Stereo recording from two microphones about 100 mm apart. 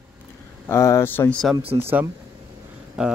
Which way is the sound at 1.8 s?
25° right (ahead or behind).